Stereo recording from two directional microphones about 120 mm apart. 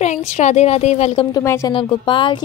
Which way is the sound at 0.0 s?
70° left (ahead or behind).